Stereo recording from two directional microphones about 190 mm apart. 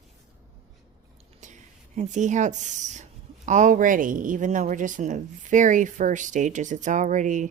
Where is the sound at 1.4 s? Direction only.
40° right (ahead or behind).